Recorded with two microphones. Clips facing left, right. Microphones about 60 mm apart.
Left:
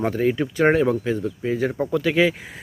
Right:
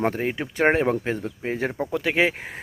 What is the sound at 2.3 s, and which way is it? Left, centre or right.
Speech, right.